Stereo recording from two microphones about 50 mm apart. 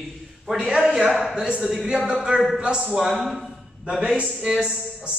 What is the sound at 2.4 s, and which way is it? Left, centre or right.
Speech, centre.